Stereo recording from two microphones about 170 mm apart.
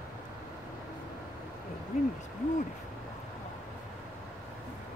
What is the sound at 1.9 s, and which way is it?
Owl, 45° left (ahead or behind).